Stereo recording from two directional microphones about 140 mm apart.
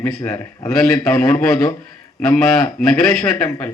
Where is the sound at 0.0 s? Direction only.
20° left (ahead or behind).